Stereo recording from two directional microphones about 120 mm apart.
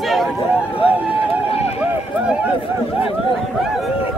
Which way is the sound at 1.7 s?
10° right (ahead or behind).